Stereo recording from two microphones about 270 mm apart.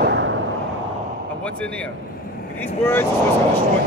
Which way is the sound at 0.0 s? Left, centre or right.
Right.